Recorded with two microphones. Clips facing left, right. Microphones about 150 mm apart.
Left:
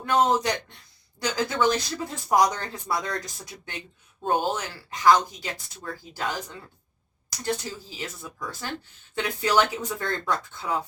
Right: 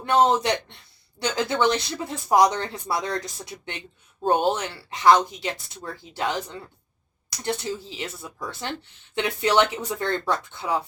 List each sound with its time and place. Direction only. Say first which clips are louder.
0.0 s speech: right 2 dB; 25° right (ahead or behind)
4.3 s speech: right 4 dB; 25° right (ahead or behind)